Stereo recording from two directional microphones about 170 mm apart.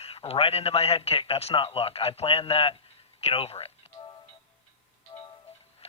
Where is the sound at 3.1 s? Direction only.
35° left (ahead or behind).